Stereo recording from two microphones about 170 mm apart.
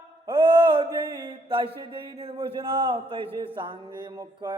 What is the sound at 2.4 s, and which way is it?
A man's voice, 25° right (ahead or behind).